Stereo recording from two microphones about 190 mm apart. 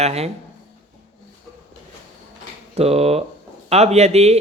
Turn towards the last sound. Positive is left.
turn(degrees=-35)  # may be behind; listen again after turning